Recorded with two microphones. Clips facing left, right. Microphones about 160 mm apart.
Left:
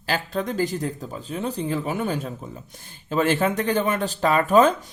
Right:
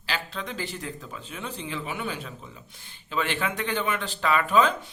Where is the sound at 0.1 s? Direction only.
45° left (ahead or behind).